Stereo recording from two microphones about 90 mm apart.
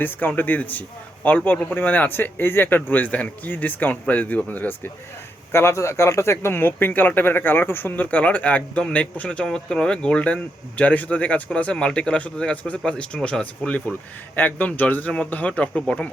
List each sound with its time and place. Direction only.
0.0 s a man's voice: 20° left (ahead or behind)
5.5 s a man's voice: 30° left (ahead or behind); by 16.0 s 15° left (ahead or behind)